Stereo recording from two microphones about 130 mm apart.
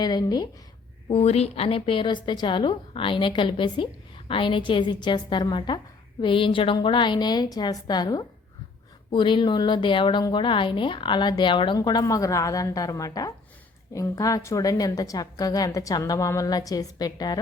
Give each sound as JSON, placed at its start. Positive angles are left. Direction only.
{"t": 0.0, "sound": "a woman's voice", "side_deg": 30}
{"t": 1.0, "sound": "a woman's voice", "side_deg": 50}